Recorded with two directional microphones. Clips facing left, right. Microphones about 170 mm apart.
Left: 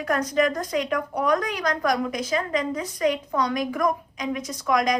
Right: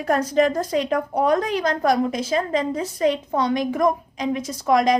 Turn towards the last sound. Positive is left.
turn(degrees=-30)  # may be behind; listen again after turning